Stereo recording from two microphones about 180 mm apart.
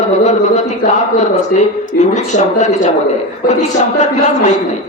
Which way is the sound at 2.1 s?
40° left (ahead or behind).